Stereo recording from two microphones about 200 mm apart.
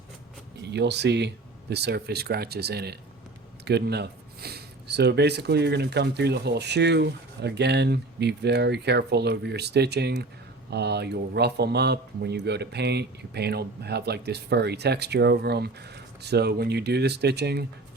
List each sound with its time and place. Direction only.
0.6 s speech: 60° right (ahead or behind)